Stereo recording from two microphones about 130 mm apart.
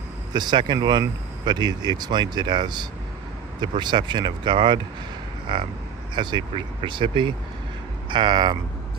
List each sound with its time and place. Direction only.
0.3 s speech: 35° right (ahead or behind)